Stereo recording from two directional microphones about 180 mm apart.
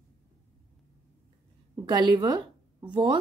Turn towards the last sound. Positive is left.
turn(degrees=-25)  # may be behind; listen again after turning